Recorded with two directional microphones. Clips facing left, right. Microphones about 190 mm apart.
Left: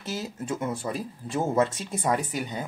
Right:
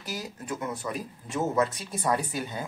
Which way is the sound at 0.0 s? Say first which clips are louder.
Left 4 dB; 25° left (ahead or behind).